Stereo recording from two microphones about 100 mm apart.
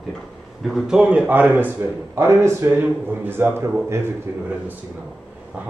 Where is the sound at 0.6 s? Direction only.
5° right (ahead or behind); by 4.1 s 25° right (ahead or behind).